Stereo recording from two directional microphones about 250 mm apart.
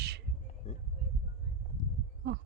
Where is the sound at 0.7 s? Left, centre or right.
Left.